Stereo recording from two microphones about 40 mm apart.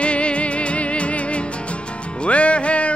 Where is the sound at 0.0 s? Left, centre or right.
Left.